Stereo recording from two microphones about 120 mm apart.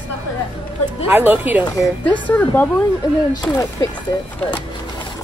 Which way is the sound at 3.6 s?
30° left (ahead or behind).